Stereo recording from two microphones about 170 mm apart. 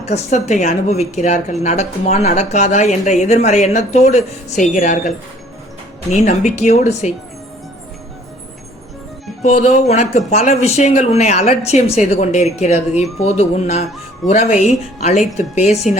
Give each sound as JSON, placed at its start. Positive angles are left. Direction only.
{"t": 0.0, "sound": "speech", "side_deg": 40}
{"t": 9.4, "sound": "speech", "side_deg": 40}